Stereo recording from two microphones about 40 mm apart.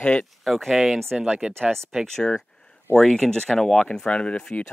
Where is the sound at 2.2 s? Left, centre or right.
Centre.